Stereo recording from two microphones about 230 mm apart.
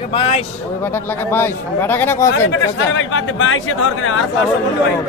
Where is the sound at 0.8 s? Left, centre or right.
Centre.